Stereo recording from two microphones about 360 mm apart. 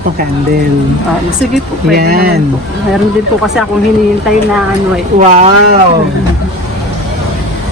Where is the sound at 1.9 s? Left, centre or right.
Right.